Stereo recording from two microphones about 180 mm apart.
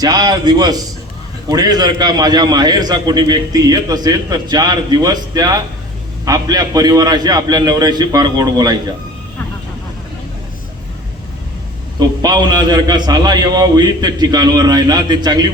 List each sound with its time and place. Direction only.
0.0 s a man's voice: 20° right (ahead or behind)
11.9 s a man's voice: 25° right (ahead or behind)